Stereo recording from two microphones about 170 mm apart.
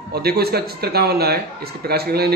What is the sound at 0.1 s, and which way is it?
Speech, 70° right (ahead or behind).